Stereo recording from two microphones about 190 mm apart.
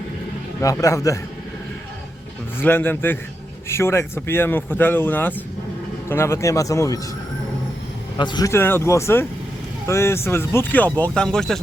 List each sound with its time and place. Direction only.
0.6 s speech: 15° left (ahead or behind)
2.6 s speech: 10° left (ahead or behind)
8.2 s speech: 20° left (ahead or behind); by 11.6 s 5° left (ahead or behind)